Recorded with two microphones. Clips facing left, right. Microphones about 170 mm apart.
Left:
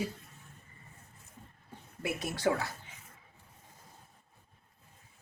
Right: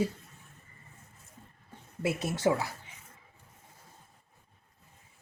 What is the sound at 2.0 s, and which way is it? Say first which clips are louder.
Speech: right 5 dB; 25° right (ahead or behind).